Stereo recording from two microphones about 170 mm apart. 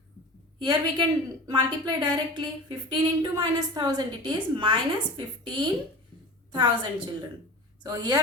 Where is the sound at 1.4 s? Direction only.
25° right (ahead or behind).